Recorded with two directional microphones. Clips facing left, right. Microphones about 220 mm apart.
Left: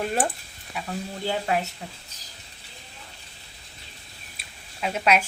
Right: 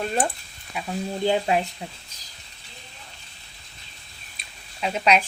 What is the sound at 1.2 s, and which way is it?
Speech, 20° right (ahead or behind).